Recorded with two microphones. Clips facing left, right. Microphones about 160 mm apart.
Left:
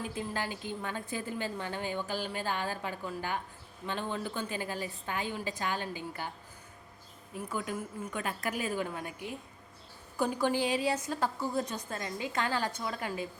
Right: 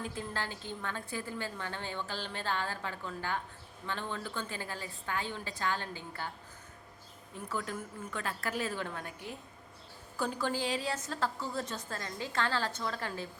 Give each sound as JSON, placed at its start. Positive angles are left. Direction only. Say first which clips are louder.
{"t": 0.0, "sound": "a woman's voice", "louder": "left 3 dB", "side_deg": 15}
{"t": 7.5, "sound": "a woman's voice", "louder": "left 1 dB", "side_deg": 15}